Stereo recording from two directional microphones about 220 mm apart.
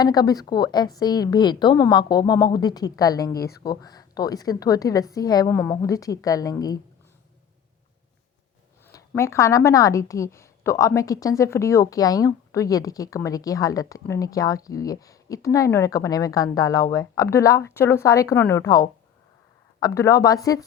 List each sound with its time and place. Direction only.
0.0 s a woman's voice: 15° left (ahead or behind)
8.9 s a woman's voice: 15° left (ahead or behind)